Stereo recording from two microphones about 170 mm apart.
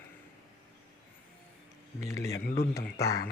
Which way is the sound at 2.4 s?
65° left (ahead or behind).